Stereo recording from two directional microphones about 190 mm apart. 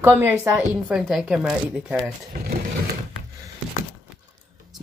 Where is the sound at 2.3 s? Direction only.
55° right (ahead or behind).